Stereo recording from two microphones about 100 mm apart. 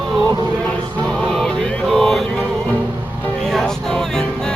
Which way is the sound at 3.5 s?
5° left (ahead or behind).